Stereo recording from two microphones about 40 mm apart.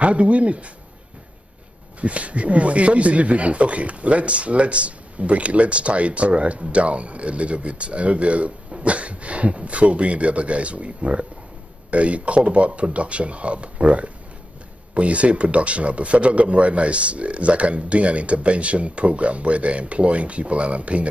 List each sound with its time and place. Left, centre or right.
0.0 s speech: right
2.0 s speech: right